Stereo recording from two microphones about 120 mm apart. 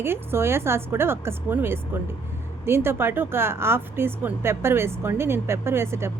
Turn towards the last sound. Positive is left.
turn(degrees=-20)  # may be behind; listen again after turning